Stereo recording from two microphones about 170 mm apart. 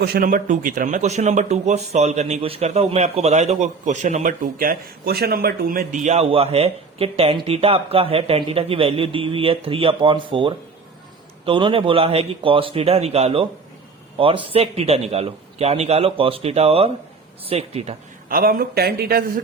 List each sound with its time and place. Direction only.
0.0 s a man's voice: 60° right (ahead or behind)
6.1 s speech: 35° right (ahead or behind)
18.3 s speech: 60° right (ahead or behind)